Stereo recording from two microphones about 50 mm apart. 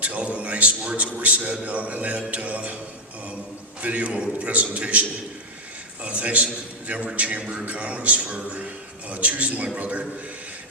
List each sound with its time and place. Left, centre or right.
0.0 s a man's voice: right
3.8 s a man's voice: right